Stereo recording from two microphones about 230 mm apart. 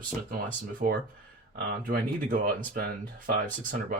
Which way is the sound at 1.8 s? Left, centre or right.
Right.